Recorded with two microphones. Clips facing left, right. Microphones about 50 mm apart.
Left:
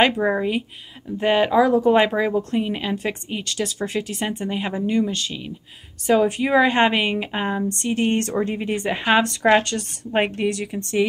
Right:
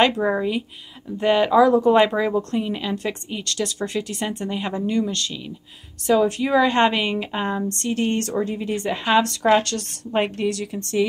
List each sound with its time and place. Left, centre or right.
0.0 s a woman's voice: centre